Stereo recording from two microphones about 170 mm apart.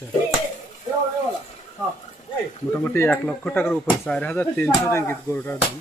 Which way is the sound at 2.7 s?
10° left (ahead or behind).